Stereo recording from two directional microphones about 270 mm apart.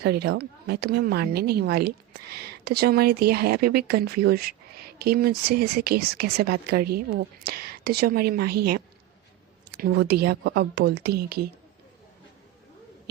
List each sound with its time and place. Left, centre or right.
0.0 s a woman's voice: right